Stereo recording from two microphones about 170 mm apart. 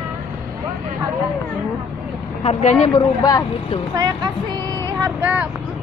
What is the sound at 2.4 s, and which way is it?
Speech, 40° left (ahead or behind).